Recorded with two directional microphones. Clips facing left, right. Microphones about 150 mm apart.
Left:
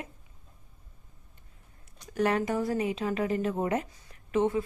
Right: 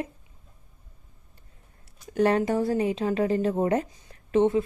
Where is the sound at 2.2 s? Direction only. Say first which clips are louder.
Right 5 dB; 30° right (ahead or behind).